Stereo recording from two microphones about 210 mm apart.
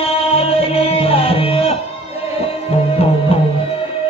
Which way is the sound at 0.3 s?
30° left (ahead or behind).